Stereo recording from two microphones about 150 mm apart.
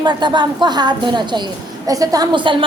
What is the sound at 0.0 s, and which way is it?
A woman's voice, 30° right (ahead or behind).